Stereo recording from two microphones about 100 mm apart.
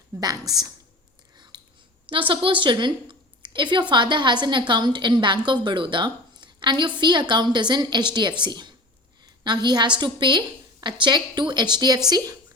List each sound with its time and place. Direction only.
0.2 s a woman's voice: 40° right (ahead or behind)
1.5 s a sound: 50° right (ahead or behind)
2.0 s a woman's voice: 60° right (ahead or behind); by 12.4 s 40° right (ahead or behind)